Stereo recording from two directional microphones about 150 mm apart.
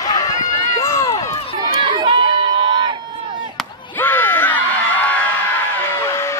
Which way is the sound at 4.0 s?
15° left (ahead or behind).